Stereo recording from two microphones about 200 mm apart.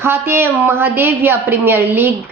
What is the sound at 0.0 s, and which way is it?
A woman's voice, 10° right (ahead or behind).